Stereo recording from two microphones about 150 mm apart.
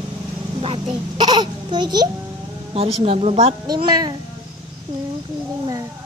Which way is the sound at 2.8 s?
40° right (ahead or behind).